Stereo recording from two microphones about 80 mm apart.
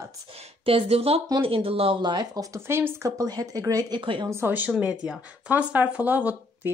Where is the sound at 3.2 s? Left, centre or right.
Right.